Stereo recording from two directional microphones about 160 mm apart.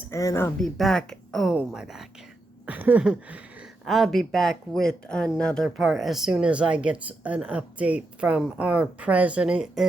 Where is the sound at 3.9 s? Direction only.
Centre (ahead or behind).